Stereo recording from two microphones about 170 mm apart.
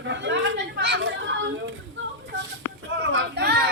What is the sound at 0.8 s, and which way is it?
Children playing, 85° right.